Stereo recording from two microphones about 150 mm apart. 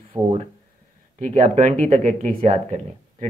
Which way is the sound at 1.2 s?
55° right (ahead or behind).